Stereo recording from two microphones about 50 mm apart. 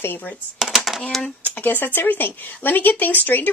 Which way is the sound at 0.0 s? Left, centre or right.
Left.